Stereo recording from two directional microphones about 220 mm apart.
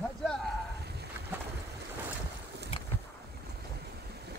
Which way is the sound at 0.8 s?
50° right (ahead or behind).